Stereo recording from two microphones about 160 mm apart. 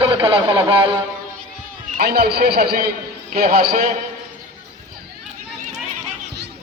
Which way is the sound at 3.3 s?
65° right (ahead or behind).